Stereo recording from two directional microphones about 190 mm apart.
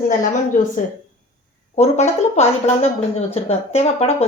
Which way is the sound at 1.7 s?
35° left (ahead or behind).